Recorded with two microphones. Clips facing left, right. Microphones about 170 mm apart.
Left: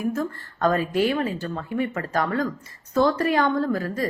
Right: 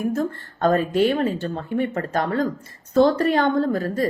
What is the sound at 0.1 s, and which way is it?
A woman's voice, 30° right (ahead or behind).